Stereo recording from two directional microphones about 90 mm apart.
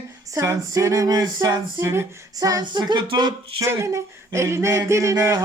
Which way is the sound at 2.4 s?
40° right (ahead or behind).